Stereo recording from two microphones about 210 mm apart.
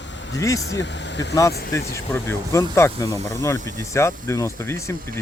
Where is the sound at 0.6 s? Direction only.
60° left (ahead or behind).